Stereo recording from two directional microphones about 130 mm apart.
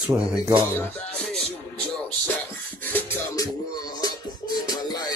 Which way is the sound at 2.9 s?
15° left (ahead or behind).